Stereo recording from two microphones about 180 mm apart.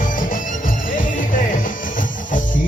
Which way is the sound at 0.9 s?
50° left (ahead or behind).